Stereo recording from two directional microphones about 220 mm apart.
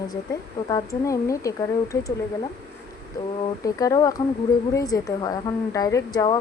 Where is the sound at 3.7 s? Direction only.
15° left (ahead or behind).